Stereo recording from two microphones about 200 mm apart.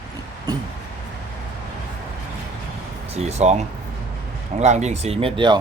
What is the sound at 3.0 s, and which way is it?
Speech, 30° right (ahead or behind).